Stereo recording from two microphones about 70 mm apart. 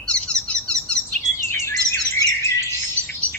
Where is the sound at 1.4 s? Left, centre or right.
Left.